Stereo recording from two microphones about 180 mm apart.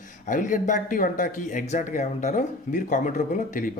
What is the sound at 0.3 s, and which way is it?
Speech, 45° left (ahead or behind).